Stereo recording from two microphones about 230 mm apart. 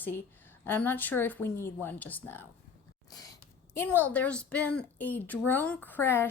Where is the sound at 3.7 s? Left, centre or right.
Centre.